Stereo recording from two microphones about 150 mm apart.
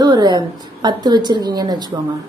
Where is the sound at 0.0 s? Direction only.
30° right (ahead or behind).